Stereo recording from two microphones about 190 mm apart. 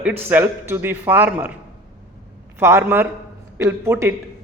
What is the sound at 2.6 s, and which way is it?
Speech, 10° right (ahead or behind).